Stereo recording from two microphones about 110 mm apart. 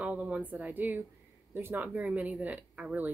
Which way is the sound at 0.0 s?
10° right (ahead or behind).